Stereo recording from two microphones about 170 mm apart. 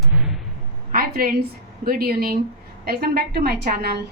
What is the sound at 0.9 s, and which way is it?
A woman's voice, 60° right (ahead or behind).